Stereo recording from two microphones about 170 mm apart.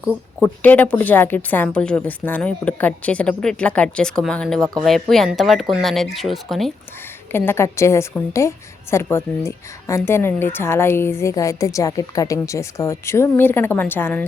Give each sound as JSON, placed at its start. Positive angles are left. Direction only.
{"t": 0.0, "sound": "a sound", "side_deg": -5}
{"t": 0.4, "sound": "a woman's voice", "side_deg": 10}
{"t": 7.3, "sound": "a woman's voice", "side_deg": 15}